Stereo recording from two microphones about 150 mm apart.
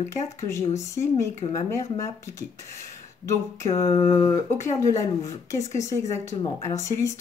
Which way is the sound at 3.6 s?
20° left (ahead or behind).